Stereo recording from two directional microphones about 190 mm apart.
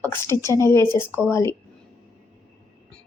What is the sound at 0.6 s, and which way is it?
Speech, 15° left (ahead or behind).